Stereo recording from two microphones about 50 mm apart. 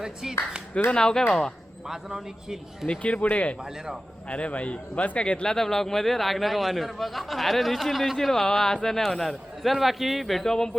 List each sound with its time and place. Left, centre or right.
0.0 s a man's voice: centre
0.9 s speech: centre
1.9 s a man's voice: centre
3.0 s a man's voice: left
5.5 s speech: centre